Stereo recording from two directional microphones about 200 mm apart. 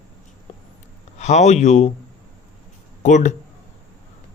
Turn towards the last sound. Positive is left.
turn(degrees=35)  # may be behind; listen again after turning